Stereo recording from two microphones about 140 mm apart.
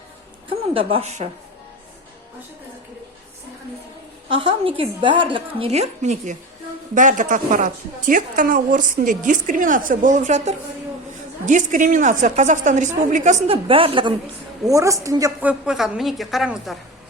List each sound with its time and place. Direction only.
0.7 s a woman's voice: 40° right (ahead or behind)
4.3 s a woman's voice: 40° right (ahead or behind); by 6.3 s 55° right (ahead or behind)
6.9 s a woman's voice: 70° right (ahead or behind)
13.5 s a woman's voice: 40° right (ahead or behind)
14.6 s a woman's voice: 25° right (ahead or behind)
15.4 s speech: 10° right (ahead or behind)